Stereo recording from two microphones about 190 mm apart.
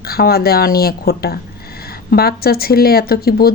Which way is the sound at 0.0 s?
55° left (ahead or behind).